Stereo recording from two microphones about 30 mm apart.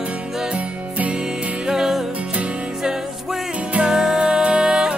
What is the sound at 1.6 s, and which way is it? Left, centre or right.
Music, centre.